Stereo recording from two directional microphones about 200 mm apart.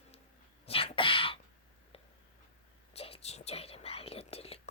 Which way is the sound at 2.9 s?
30° left (ahead or behind).